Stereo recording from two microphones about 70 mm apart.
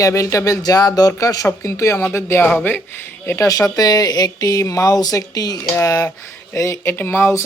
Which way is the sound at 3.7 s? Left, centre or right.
Left.